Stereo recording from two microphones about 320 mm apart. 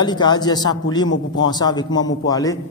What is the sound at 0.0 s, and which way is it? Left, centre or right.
A man's voice, centre.